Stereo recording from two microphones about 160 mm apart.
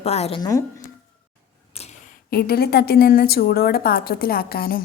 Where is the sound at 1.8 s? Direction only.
40° left (ahead or behind).